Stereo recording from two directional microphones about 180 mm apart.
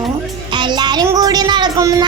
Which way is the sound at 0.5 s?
25° right (ahead or behind).